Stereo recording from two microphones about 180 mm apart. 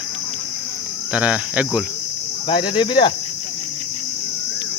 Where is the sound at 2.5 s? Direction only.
25° left (ahead or behind).